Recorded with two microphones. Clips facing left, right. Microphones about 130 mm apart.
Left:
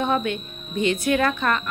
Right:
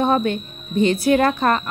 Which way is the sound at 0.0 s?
35° right (ahead or behind).